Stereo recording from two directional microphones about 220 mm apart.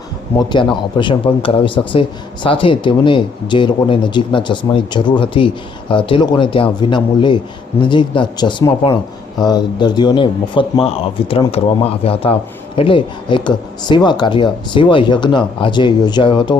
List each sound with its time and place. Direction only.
0.3 s speech: 20° left (ahead or behind)